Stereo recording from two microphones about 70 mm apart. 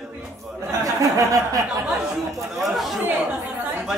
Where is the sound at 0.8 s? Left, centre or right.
Right.